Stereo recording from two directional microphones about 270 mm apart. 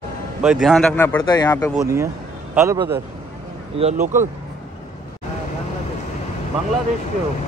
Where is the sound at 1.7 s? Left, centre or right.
Centre.